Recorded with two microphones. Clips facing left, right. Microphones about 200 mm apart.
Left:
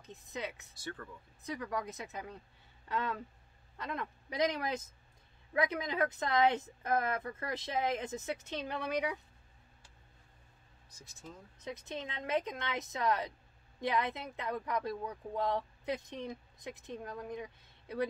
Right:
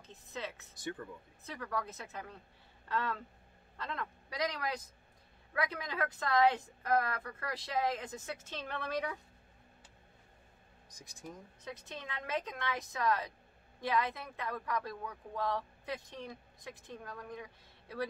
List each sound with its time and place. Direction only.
0.0 s speech: 15° left (ahead or behind)
0.7 s speech: 15° right (ahead or behind)
1.4 s speech: 15° left (ahead or behind)
10.9 s speech: 15° right (ahead or behind)
11.6 s speech: 20° left (ahead or behind)